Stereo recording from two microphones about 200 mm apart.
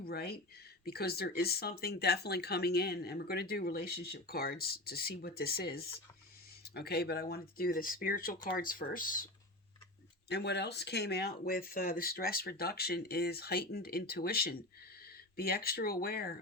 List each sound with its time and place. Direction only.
0.0 s speech: 50° left (ahead or behind)
10.2 s speech: 55° left (ahead or behind)